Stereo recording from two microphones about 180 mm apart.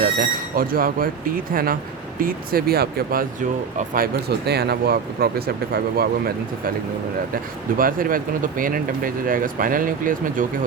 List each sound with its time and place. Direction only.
0.0 s speech: 55° right (ahead or behind)
7.8 s speech: 50° right (ahead or behind)